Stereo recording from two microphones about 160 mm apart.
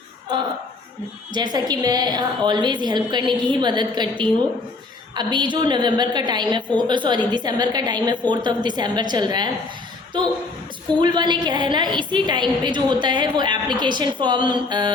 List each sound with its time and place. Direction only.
1.3 s a woman's voice: 25° right (ahead or behind)
5.1 s a woman's voice: 30° right (ahead or behind)